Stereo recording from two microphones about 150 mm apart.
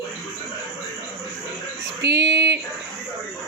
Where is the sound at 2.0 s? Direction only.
90° right.